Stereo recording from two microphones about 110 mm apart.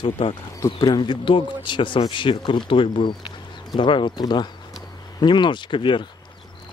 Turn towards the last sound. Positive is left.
turn(degrees=50)  # may be behind; listen again after turning